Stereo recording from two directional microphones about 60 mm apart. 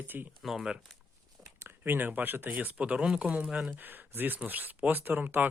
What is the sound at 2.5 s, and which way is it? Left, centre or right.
Speech, right.